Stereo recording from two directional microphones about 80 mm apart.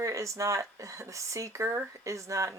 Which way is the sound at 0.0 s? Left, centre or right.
Right.